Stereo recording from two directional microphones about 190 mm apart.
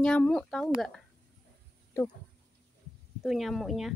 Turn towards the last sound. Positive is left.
turn(degrees=0)  # may be behind; listen again after turning